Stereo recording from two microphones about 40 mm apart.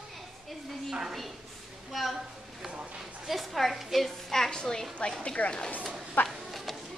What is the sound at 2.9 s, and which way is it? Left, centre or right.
A woman's voice, centre.